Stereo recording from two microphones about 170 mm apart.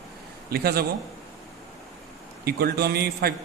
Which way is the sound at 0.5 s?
65° right (ahead or behind).